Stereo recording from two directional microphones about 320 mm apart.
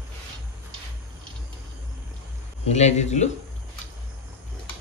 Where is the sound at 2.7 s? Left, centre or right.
Left.